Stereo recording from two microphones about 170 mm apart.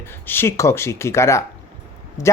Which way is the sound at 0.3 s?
15° left (ahead or behind).